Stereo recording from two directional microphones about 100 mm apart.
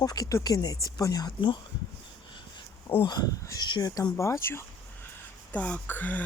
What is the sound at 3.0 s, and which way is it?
Speech, 40° left (ahead or behind).